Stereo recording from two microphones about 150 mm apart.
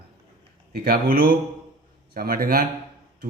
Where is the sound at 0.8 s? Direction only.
80° right.